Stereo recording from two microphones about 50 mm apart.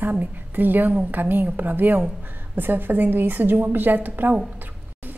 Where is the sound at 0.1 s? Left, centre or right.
Right.